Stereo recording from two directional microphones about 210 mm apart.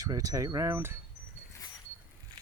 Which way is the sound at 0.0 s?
15° right (ahead or behind).